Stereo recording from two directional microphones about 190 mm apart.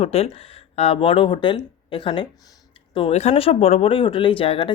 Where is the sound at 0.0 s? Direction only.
30° left (ahead or behind).